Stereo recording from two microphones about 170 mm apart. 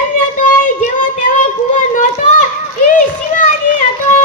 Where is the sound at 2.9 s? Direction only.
50° left (ahead or behind).